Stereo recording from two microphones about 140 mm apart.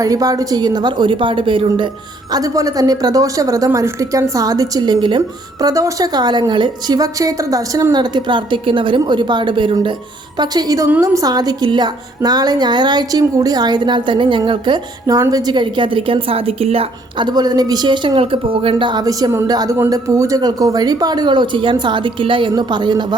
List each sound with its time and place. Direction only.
0.0 s a woman's voice: 25° right (ahead or behind)
2.3 s a woman's voice: 25° right (ahead or behind)